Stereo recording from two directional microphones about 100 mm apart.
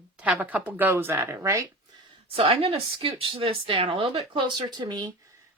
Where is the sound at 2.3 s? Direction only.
75° right (ahead or behind); by 5.1 s 45° right (ahead or behind).